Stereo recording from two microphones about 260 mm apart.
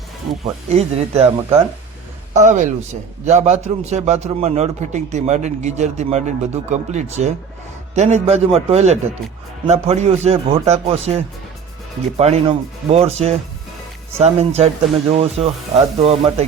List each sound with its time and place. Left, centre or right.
0.7 s a man's voice: right